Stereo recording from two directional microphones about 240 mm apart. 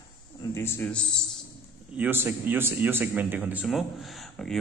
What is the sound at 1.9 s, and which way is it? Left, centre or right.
A man's voice, centre.